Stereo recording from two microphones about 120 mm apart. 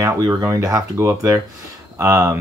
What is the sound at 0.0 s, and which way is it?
Speech, 30° right (ahead or behind).